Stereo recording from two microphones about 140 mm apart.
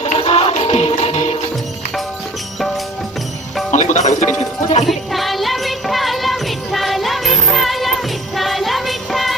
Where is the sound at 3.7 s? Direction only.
55° left (ahead or behind).